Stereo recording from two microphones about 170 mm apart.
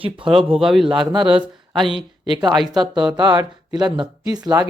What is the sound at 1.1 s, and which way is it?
Speech, 30° right (ahead or behind).